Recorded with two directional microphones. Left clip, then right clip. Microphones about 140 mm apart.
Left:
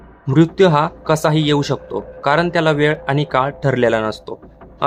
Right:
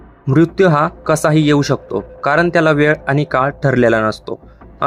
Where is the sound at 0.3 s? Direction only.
20° right (ahead or behind).